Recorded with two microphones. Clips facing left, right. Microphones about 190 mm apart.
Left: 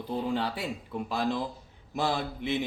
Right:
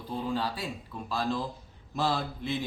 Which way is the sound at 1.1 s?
20° left (ahead or behind).